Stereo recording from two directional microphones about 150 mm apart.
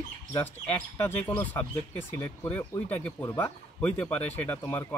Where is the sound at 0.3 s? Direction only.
15° left (ahead or behind).